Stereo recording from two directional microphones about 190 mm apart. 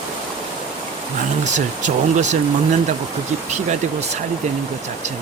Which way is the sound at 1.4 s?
40° right (ahead or behind).